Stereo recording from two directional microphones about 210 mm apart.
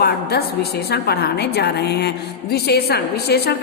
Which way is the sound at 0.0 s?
50° left (ahead or behind).